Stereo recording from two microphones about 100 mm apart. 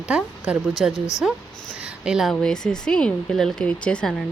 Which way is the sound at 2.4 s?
5° left (ahead or behind).